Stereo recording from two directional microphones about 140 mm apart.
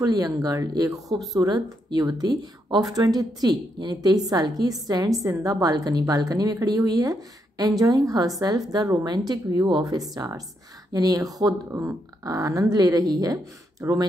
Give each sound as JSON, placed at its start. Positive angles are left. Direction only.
{"t": 0.0, "sound": "speech", "side_deg": -25}